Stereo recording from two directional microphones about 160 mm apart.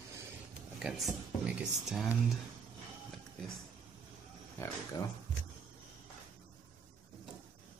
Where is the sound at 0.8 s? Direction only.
Centre (ahead or behind).